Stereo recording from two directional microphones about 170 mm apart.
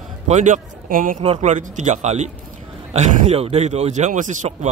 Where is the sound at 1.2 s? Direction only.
40° right (ahead or behind).